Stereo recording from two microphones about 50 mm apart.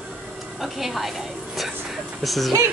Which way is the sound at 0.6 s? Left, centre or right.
Centre.